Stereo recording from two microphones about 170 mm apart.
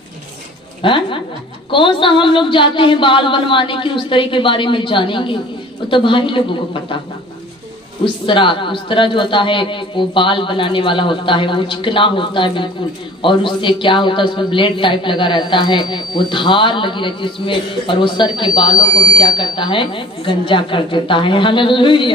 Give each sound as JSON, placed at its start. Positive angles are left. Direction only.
{"t": 0.8, "sound": "a man's voice", "side_deg": 30}
{"t": 8.0, "sound": "a man's voice", "side_deg": 30}